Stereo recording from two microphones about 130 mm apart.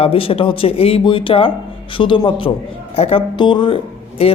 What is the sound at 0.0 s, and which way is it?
A man's voice, 45° left (ahead or behind).